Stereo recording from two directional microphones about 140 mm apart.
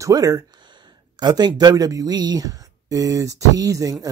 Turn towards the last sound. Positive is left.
turn(degrees=-25)  # may be behind; listen again after turning